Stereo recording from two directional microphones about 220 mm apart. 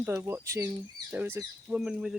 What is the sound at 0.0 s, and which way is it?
Speech, 10° right (ahead or behind).